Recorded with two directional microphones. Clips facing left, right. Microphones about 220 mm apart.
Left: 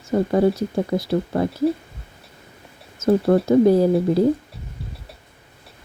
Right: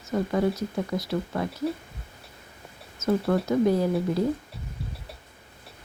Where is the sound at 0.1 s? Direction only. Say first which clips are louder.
Left 7 dB; 35° left (ahead or behind).